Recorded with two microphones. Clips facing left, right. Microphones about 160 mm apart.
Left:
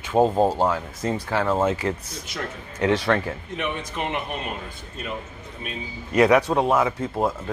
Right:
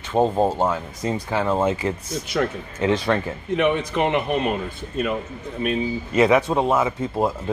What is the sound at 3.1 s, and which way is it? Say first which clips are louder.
Speech: even; 5° right (ahead or behind).